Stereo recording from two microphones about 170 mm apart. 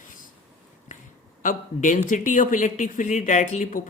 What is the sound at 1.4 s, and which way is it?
A woman's voice, 50° left (ahead or behind).